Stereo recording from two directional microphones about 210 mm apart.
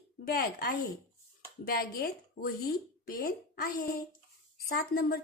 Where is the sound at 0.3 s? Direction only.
45° left (ahead or behind).